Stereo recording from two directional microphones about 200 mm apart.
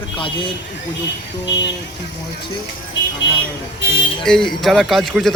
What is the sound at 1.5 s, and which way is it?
Speech, 65° left (ahead or behind).